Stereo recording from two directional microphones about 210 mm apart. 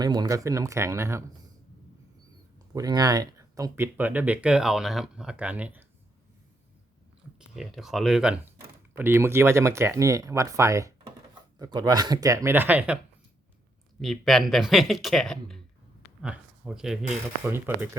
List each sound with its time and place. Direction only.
0.0 s speech: 20° right (ahead or behind)
2.7 s speech: 20° right (ahead or behind)
7.3 s speech: centre (ahead or behind)
14.0 s speech: centre (ahead or behind)